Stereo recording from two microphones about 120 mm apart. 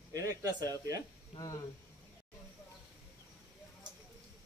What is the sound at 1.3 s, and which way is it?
Speech, 35° left (ahead or behind).